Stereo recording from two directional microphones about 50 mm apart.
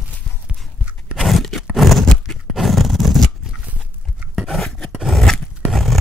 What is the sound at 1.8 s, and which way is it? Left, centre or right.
Horse, centre.